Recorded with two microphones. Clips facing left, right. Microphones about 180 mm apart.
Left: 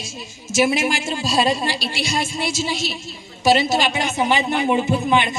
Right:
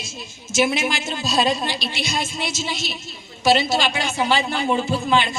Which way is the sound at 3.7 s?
15° left (ahead or behind).